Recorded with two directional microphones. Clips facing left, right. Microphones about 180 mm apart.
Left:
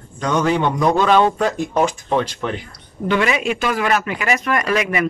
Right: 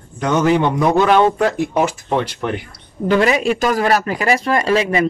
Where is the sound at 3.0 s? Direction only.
40° right (ahead or behind).